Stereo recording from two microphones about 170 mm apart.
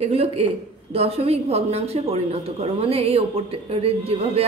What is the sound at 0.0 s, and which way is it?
A woman's voice, 35° right (ahead or behind).